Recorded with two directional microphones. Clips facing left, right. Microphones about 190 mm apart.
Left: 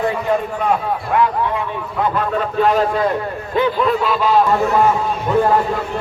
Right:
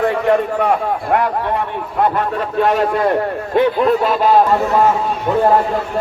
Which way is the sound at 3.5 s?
50° right (ahead or behind).